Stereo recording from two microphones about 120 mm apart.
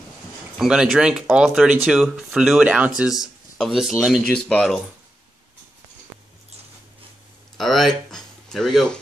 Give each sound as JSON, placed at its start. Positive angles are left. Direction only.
{"t": 0.6, "sound": "speech", "side_deg": -5}
{"t": 7.5, "sound": "speech", "side_deg": 0}